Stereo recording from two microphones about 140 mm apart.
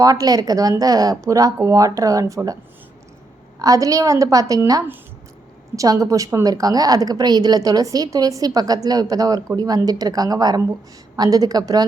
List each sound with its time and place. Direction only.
0.0 s a woman's voice: 25° right (ahead or behind)
3.6 s a woman's voice: 25° right (ahead or behind)